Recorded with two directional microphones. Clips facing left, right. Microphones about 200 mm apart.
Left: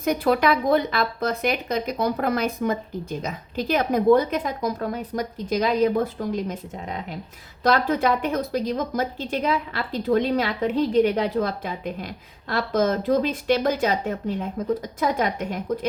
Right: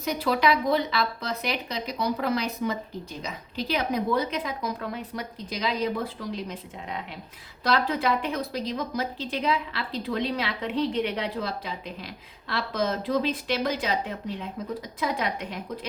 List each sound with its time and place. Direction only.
0.0 s speech: 50° left (ahead or behind)